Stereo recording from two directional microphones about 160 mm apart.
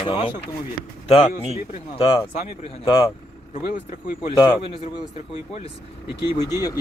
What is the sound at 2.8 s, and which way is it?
Speech, 35° left (ahead or behind).